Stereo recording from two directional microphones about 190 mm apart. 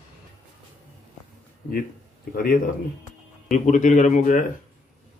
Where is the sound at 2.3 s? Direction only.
50° left (ahead or behind).